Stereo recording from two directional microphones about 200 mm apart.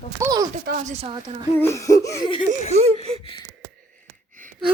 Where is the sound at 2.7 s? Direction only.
30° right (ahead or behind).